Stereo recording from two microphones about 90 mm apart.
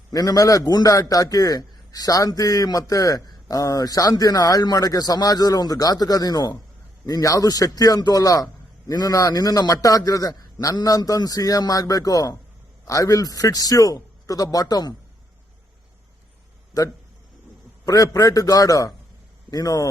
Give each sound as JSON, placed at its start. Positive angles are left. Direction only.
{"t": 0.1, "sound": "a man's voice", "side_deg": 40}
{"t": 16.7, "sound": "a man's voice", "side_deg": 45}